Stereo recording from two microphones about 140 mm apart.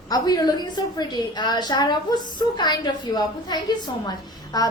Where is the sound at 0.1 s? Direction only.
30° left (ahead or behind).